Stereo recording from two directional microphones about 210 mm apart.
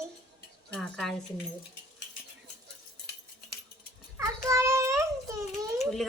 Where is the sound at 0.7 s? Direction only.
Centre (ahead or behind).